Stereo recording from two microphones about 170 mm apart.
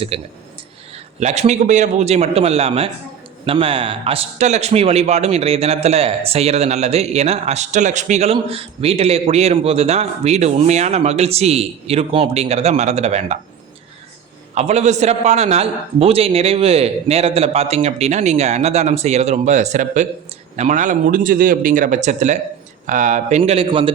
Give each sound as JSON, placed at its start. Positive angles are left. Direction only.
{"t": 0.1, "sound": "a man's voice", "side_deg": -35}
{"t": 14.5, "sound": "a man's voice", "side_deg": -40}
{"t": 23.4, "sound": "a man's voice", "side_deg": -30}